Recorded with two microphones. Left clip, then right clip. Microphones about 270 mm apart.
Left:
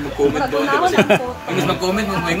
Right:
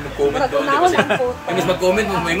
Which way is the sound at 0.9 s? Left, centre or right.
Left.